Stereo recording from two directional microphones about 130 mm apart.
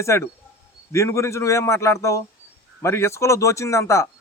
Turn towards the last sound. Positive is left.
turn(degrees=20)  # may be behind; listen again after turning